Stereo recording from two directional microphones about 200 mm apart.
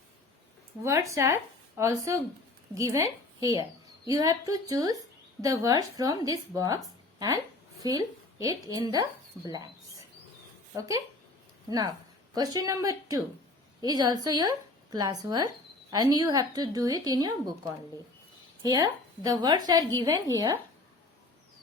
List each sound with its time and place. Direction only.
0.8 s a woman's voice: 15° right (ahead or behind)
10.8 s speech: 15° right (ahead or behind)
12.3 s a woman's voice: 20° right (ahead or behind)